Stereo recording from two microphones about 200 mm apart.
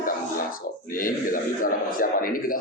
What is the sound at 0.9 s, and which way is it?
A man's voice, 45° left (ahead or behind).